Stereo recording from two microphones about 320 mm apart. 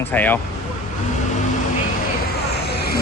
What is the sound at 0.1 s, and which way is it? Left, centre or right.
Speech, centre.